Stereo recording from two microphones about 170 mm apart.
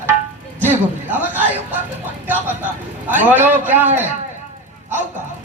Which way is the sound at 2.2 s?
10° right (ahead or behind).